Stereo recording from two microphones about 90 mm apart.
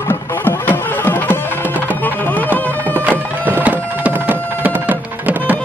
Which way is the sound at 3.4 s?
20° right (ahead or behind).